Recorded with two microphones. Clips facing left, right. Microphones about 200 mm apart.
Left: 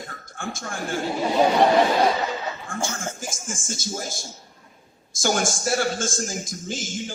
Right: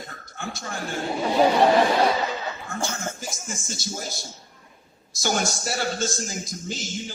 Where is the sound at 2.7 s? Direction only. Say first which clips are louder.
Even; 50° left (ahead or behind).